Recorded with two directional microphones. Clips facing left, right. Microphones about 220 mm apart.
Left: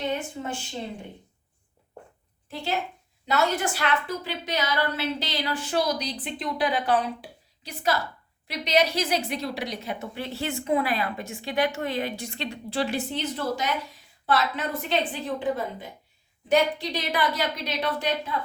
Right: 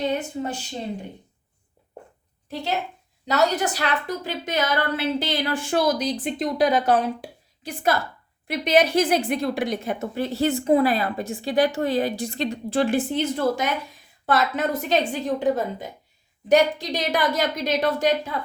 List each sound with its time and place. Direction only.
2.5 s a woman's voice: 40° right (ahead or behind)